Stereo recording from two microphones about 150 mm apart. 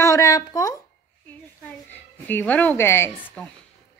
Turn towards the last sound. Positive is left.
turn(degrees=10)  # may be behind; listen again after turning